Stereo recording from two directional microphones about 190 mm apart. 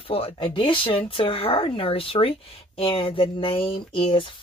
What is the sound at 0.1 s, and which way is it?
Speech, 30° left (ahead or behind).